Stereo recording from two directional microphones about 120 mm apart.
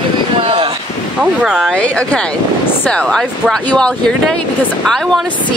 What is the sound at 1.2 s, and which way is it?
Speech, 5° right (ahead or behind).